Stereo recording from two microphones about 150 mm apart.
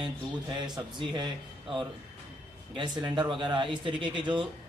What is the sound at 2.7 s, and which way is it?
Speech, 30° right (ahead or behind).